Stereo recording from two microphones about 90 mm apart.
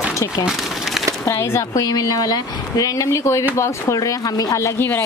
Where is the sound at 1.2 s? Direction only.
30° left (ahead or behind).